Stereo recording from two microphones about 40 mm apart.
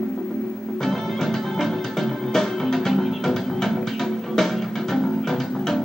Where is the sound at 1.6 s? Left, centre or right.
Centre.